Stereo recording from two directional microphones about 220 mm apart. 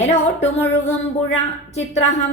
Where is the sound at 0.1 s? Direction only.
30° left (ahead or behind).